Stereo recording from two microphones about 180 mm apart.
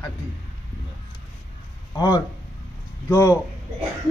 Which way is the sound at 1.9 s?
20° left (ahead or behind).